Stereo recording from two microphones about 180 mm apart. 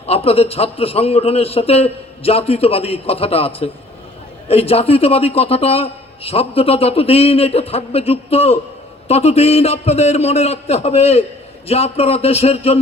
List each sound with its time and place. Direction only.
0.0 s a man's voice: 35° left (ahead or behind)